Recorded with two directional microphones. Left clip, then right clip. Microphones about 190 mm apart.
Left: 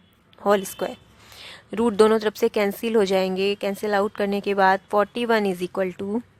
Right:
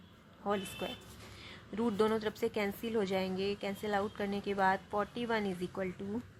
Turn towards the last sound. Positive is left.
turn(degrees=50)  # may be behind; listen again after turning